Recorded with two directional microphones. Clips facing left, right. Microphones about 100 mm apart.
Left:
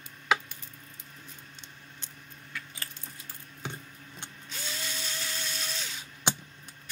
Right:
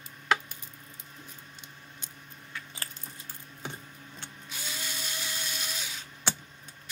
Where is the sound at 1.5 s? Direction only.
10° right (ahead or behind).